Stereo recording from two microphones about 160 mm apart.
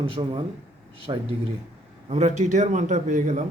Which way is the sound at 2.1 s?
45° right (ahead or behind).